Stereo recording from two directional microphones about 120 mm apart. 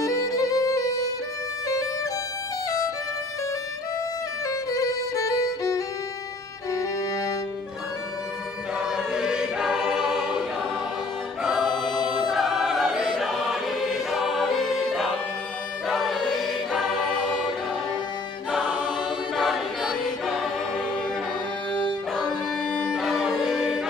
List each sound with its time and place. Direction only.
0.0 s violin: 30° left (ahead or behind)
4.5 s violin: 30° left (ahead or behind)
8.7 s choir: 5° right (ahead or behind)
11.4 s music: centre (ahead or behind)
12.0 s choir: centre (ahead or behind)
18.5 s music: centre (ahead or behind)
19.3 s a capella: centre (ahead or behind)
22.7 s music: 5° left (ahead or behind)